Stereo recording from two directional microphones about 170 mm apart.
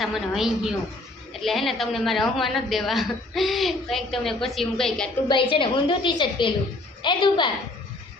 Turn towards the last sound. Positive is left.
turn(degrees=25)  # may be behind; listen again after turning